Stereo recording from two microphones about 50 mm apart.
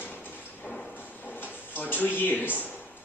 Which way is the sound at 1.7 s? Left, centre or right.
Left.